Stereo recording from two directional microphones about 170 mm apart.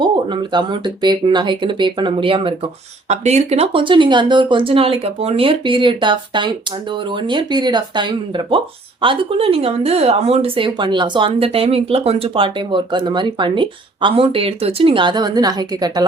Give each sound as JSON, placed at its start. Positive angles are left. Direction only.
{"t": 0.0, "sound": "speech", "side_deg": -25}